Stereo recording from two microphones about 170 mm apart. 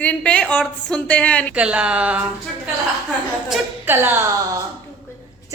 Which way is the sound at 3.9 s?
15° right (ahead or behind).